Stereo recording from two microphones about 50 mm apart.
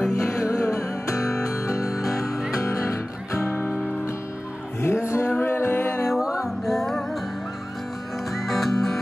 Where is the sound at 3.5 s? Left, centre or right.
Left.